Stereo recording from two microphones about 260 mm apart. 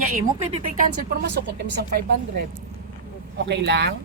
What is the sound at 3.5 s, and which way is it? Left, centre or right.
Speech, right.